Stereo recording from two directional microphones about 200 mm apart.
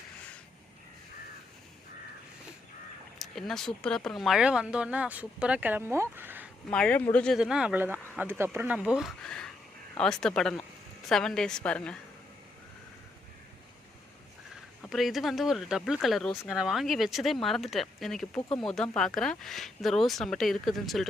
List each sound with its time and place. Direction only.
3.2 s speech: centre (ahead or behind)
6.7 s speech: 5° left (ahead or behind)
14.8 s speech: centre (ahead or behind)
18.3 s speech: 25° left (ahead or behind)
18.6 s speech: centre (ahead or behind)